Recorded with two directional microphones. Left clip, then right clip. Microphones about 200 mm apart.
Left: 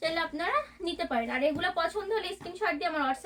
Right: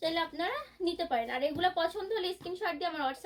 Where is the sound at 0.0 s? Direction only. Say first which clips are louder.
Left 2 dB; 20° left (ahead or behind).